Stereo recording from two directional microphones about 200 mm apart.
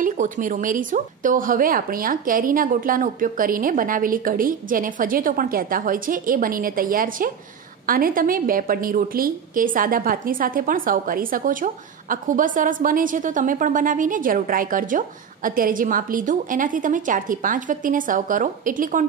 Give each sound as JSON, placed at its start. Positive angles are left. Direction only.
{"t": 0.0, "sound": "a woman's voice", "side_deg": -40}